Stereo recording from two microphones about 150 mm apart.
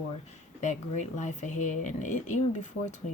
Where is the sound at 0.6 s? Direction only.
50° left (ahead or behind).